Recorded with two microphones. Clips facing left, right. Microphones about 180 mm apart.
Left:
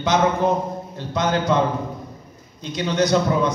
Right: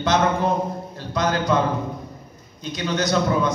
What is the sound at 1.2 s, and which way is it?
Speech, 25° left (ahead or behind).